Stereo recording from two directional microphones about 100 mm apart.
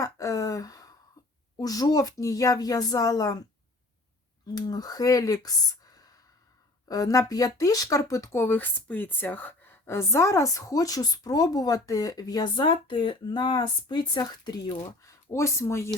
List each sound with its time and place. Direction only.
0.0 s a sound: 35° left (ahead or behind)
1.5 s speech: 40° left (ahead or behind)
4.5 s speech: 40° left (ahead or behind)
6.8 s speech: 35° left (ahead or behind)
12.5 s speech: 50° left (ahead or behind)
14.8 s speech: 30° left (ahead or behind)